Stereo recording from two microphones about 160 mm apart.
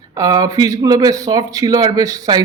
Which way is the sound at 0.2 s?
20° right (ahead or behind).